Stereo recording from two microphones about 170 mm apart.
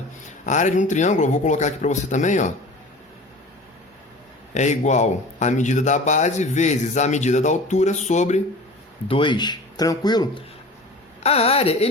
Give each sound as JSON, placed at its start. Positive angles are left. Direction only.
{"t": 0.3, "sound": "speech", "side_deg": 45}
{"t": 4.5, "sound": "speech", "side_deg": 45}
{"t": 9.0, "sound": "speech", "side_deg": 30}
{"t": 11.2, "sound": "speech", "side_deg": 35}